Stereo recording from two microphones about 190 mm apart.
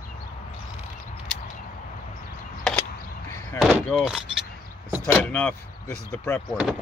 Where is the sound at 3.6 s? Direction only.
5° left (ahead or behind).